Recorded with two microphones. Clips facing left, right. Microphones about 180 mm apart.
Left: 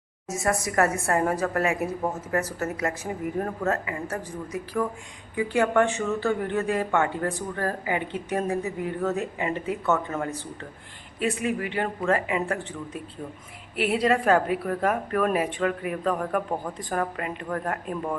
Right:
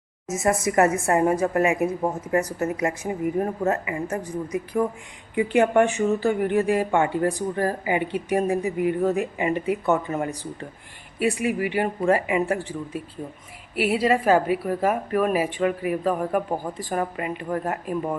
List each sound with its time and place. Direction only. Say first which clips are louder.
0.3 s a woman's voice: right 4 dB; 20° right (ahead or behind)
5.3 s a woman's voice: right 4 dB; 20° right (ahead or behind)